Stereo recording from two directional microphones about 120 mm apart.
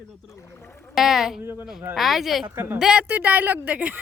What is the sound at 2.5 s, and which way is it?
Speech, 20° right (ahead or behind).